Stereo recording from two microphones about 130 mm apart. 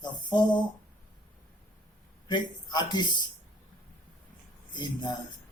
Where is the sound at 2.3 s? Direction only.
35° left (ahead or behind).